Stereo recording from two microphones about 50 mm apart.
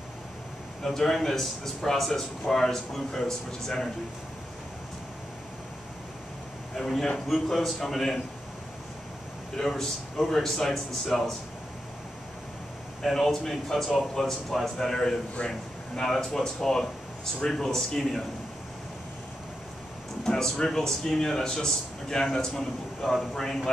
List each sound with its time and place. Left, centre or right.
0.8 s a man's voice: centre
6.7 s a man's voice: centre
9.6 s a man's voice: centre
13.0 s a man's voice: centre
20.2 s a man's voice: centre